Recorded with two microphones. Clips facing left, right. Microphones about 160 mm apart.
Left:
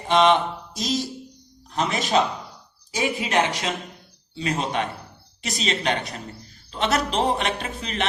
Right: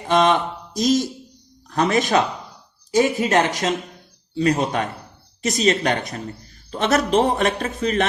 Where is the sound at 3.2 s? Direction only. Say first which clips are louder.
Right 4 dB; 45° right (ahead or behind).